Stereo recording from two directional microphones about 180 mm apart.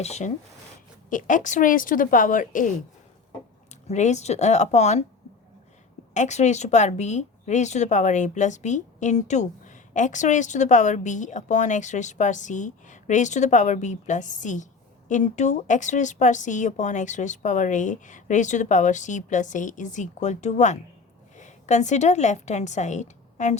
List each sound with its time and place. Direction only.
0.0 s a woman's voice: 40° left (ahead or behind)
3.8 s a woman's voice: 40° left (ahead or behind)
6.1 s a woman's voice: 40° left (ahead or behind)